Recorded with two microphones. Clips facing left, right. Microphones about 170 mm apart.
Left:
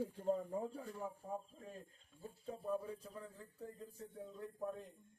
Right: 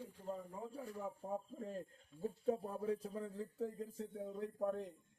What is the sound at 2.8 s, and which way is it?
Speech, 75° right (ahead or behind).